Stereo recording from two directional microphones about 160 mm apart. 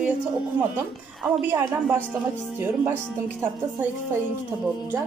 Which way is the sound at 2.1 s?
15° right (ahead or behind).